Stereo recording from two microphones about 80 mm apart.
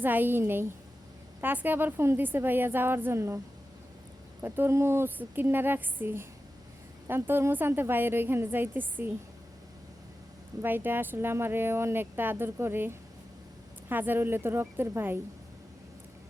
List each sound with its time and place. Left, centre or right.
0.0 s speech: right
10.6 s speech: right